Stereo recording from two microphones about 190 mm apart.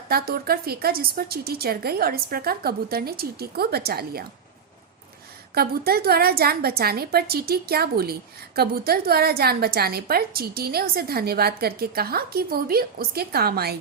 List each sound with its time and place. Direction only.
0.1 s a woman's voice: 50° right (ahead or behind)
5.5 s a woman's voice: 55° right (ahead or behind)